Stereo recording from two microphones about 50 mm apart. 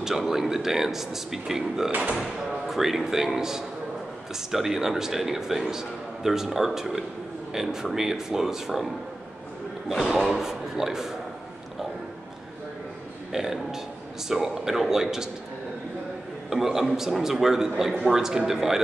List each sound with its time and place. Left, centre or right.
0.0 s a man's voice: centre
1.9 s speech: right
2.7 s a man's voice: centre
10.1 s a man's voice: centre
13.3 s a man's voice: centre
16.4 s a man's voice: centre